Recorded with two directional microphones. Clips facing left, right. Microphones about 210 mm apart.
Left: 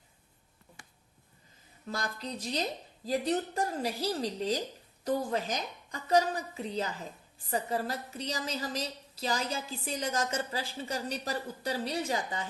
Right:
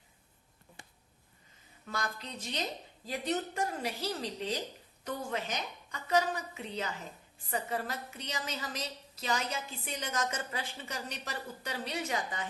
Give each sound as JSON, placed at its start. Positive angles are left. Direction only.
{"t": 1.9, "sound": "a woman's voice", "side_deg": 35}